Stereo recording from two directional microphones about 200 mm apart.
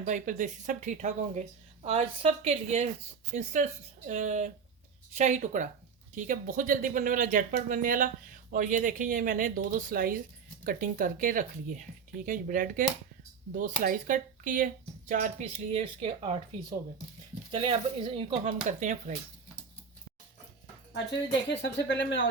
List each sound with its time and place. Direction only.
0.0 s speech: 40° right (ahead or behind)
21.5 s speech: 60° left (ahead or behind)